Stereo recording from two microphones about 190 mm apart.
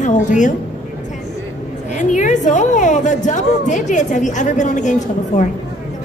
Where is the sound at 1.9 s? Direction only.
40° left (ahead or behind).